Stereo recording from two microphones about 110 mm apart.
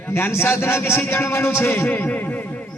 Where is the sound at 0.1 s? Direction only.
20° left (ahead or behind).